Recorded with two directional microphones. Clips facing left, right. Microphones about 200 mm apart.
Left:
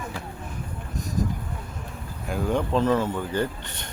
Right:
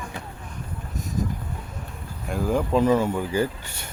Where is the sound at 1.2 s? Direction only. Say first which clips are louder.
Left 1 dB; centre (ahead or behind).